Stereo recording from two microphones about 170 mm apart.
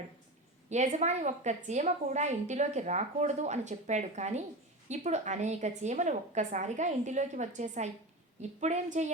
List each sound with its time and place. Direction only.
0.7 s a woman's voice: 45° right (ahead or behind)